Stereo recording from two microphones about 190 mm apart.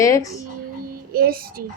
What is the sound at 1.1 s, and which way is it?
Speech, 50° right (ahead or behind).